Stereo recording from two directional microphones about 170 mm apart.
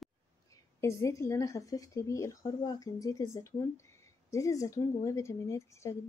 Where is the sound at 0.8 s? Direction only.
15° left (ahead or behind).